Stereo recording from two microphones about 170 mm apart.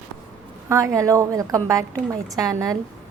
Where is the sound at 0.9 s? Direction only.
20° right (ahead or behind).